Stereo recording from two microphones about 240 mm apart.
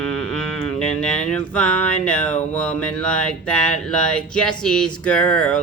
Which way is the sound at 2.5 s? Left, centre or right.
Centre.